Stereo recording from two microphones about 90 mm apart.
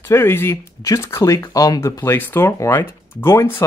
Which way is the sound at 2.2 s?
25° left (ahead or behind).